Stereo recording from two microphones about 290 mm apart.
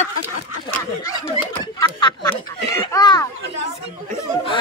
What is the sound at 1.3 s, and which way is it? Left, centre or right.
Laughter, centre.